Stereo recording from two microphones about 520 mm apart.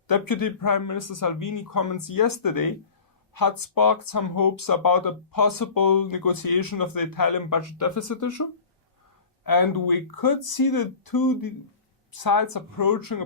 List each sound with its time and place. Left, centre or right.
0.1 s speech: left